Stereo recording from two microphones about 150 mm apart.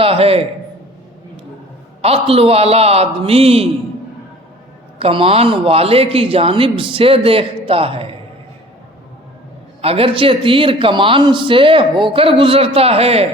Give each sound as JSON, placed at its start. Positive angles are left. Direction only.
{"t": 0.0, "sound": "a man's voice", "side_deg": -40}
{"t": 2.0, "sound": "speech", "side_deg": -40}
{"t": 4.9, "sound": "speech", "side_deg": -40}
{"t": 9.8, "sound": "speech", "side_deg": -40}